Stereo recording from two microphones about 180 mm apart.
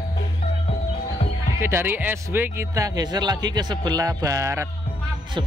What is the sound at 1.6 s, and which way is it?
Speech, 15° right (ahead or behind).